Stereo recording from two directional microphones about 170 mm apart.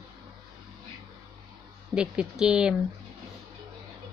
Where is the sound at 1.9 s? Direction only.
5° right (ahead or behind).